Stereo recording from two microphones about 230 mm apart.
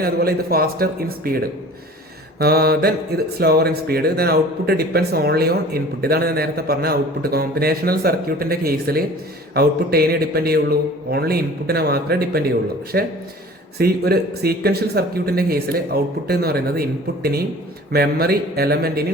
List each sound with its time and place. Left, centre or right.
0.0 s speech: right